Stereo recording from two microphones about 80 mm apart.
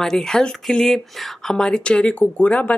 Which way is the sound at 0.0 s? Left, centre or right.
Centre.